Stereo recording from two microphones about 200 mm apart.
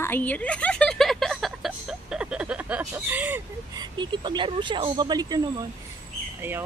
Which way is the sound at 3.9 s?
20° right (ahead or behind).